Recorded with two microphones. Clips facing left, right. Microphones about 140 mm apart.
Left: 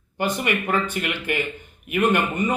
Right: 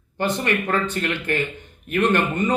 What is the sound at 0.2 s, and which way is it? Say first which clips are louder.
Speech: right 1 dB; 10° left (ahead or behind).